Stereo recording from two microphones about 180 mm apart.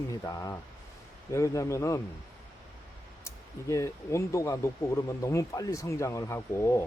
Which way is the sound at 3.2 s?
15° left (ahead or behind).